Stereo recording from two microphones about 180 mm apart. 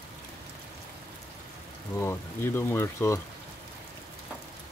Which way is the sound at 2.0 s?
15° left (ahead or behind).